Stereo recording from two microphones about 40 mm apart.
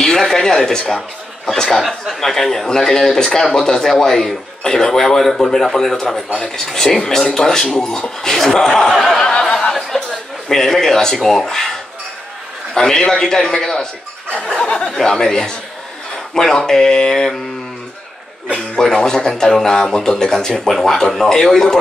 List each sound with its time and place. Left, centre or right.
0.0 s speech: centre
1.8 s a man's voice: centre
12.7 s a man's voice: centre
14.3 s a sound: left
15.0 s a man's voice: centre
18.8 s a man's voice: centre